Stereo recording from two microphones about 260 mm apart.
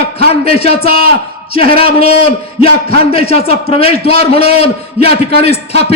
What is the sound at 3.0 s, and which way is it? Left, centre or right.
A man's voice, left.